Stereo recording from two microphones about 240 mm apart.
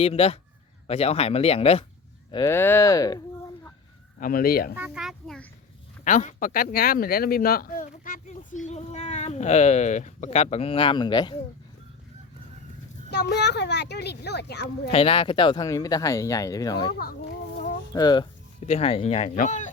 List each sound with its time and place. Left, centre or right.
0.0 s speech: left
2.3 s speech: centre
4.2 s speech: left
4.7 s a child's voice: centre
6.1 s speech: left
13.1 s a child's voice: left
14.8 s speech: left
17.9 s speech: centre